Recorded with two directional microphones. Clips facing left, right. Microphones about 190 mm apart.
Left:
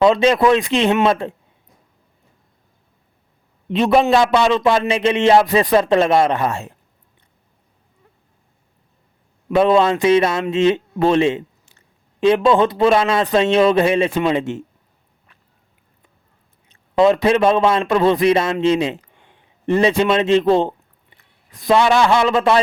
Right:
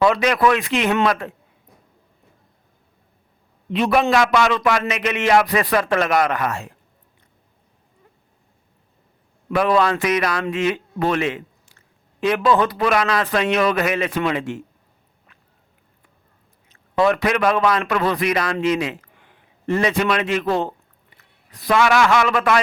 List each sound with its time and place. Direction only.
0.0 s a man's voice: 25° left (ahead or behind)
3.7 s a man's voice: 25° left (ahead or behind)
9.5 s a man's voice: 25° left (ahead or behind)
17.0 s a man's voice: 20° left (ahead or behind)